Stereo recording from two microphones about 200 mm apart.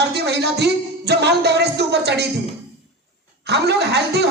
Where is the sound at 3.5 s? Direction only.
55° right (ahead or behind).